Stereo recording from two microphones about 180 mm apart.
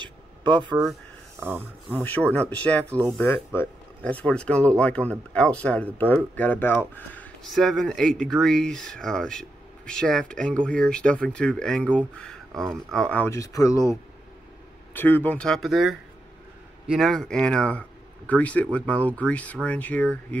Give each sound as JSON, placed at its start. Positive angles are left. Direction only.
{"t": 0.6, "sound": "speech", "side_deg": -25}
{"t": 1.4, "sound": "speech", "side_deg": -10}
{"t": 2.0, "sound": "speech", "side_deg": 10}
{"t": 12.2, "sound": "a sound", "side_deg": 5}
{"t": 12.9, "sound": "speech", "side_deg": 5}
{"t": 15.0, "sound": "speech", "side_deg": 10}